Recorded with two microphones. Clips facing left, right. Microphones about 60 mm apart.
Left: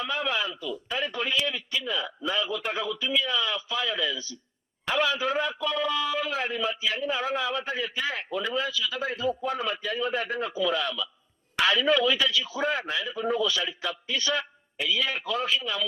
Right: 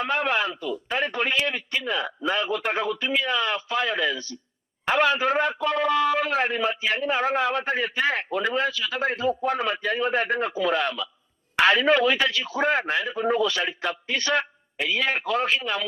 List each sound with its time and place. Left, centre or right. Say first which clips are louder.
0.0 s a man's voice: right 5 dB; right